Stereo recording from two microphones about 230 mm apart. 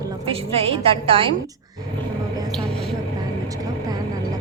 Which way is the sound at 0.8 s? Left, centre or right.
Right.